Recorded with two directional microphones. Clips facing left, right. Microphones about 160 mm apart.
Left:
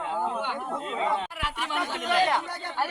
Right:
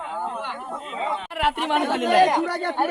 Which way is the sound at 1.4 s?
60° right (ahead or behind).